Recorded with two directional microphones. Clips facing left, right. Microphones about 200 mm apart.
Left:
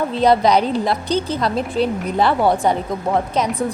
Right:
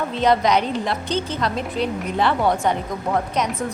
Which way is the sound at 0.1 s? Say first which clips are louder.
Left 3 dB; 35° left (ahead or behind).